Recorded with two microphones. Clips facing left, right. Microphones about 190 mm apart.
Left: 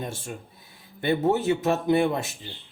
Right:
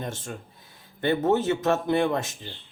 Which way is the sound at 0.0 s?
10° left (ahead or behind).